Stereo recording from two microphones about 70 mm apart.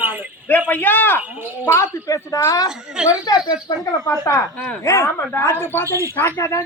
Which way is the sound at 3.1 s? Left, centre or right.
Left.